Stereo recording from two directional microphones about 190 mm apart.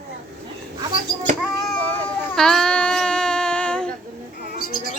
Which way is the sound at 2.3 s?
Centre (ahead or behind).